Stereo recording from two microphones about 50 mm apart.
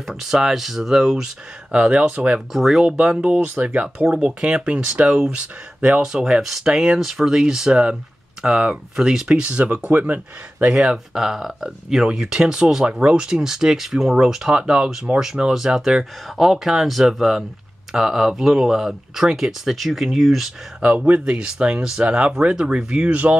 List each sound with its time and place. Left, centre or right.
0.0 s speech: centre; by 2.4 s right
2.5 s speech: centre
3.5 s speech: right
9.4 s speech: right
9.8 s speech: right
10.7 s speech: centre
20.9 s speech: centre